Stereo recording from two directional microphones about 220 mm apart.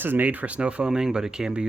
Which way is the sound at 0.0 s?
10° right (ahead or behind).